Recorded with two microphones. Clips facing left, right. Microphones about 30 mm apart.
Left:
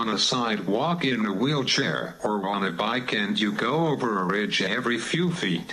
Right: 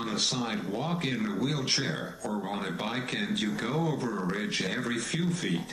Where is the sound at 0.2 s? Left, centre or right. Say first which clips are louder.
Left 6 dB; left.